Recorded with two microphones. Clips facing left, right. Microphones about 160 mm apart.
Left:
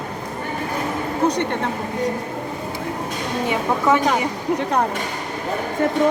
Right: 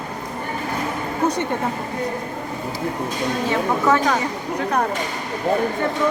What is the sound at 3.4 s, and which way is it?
Speech, 15° left (ahead or behind).